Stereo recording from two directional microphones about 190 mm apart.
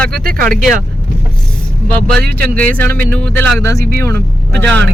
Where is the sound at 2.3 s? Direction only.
5° left (ahead or behind).